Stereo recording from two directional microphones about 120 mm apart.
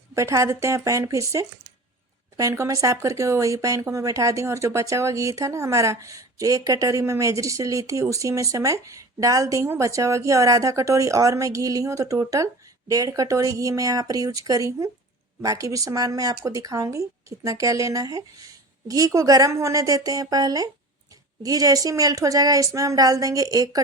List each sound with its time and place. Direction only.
0.1 s a woman's voice: 25° right (ahead or behind)